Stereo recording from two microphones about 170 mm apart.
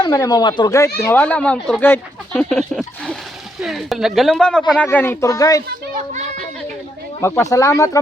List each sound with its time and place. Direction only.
0.0 s speech: 20° left (ahead or behind)
7.2 s speech: 15° left (ahead or behind)